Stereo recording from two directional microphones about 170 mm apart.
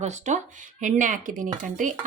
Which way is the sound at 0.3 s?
45° right (ahead or behind).